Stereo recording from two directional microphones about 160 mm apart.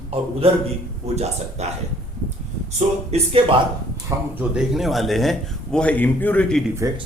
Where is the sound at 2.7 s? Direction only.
40° right (ahead or behind).